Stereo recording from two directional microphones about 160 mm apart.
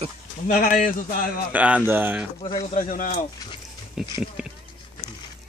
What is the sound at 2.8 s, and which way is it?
Speech, 55° left (ahead or behind).